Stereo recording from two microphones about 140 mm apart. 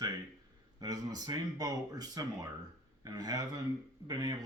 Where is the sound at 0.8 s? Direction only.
30° right (ahead or behind).